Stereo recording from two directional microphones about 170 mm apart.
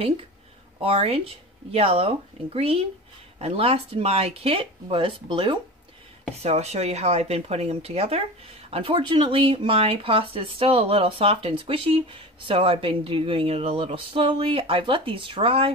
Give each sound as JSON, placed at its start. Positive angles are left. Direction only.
{"t": 0.7, "sound": "speech", "side_deg": -35}